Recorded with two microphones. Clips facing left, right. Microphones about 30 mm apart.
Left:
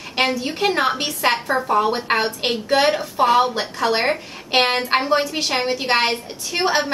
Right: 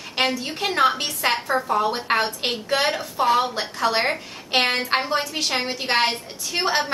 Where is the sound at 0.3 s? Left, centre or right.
Centre.